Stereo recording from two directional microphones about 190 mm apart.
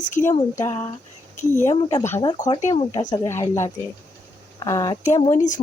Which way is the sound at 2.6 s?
40° left (ahead or behind).